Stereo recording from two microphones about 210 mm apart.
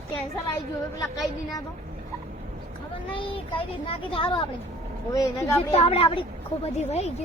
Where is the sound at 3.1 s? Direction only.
25° left (ahead or behind).